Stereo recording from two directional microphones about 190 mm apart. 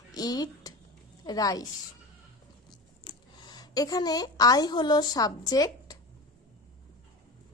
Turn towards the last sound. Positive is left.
turn(degrees=20)  # may be behind; listen again after turning